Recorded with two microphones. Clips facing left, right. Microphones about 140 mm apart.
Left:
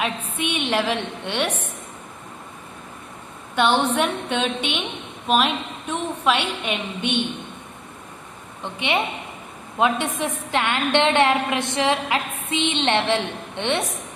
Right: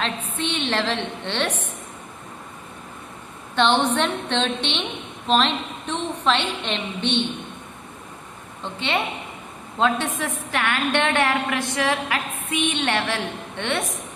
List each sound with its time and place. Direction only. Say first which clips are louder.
0.0 s a woman's voice: left 1 dB; 10° left (ahead or behind)
3.5 s a woman's voice: even; 10° left (ahead or behind)
8.6 s a woman's voice: left 1 dB; 15° left (ahead or behind)